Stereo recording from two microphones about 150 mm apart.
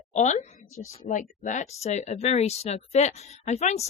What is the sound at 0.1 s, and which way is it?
A woman's voice, 50° left (ahead or behind).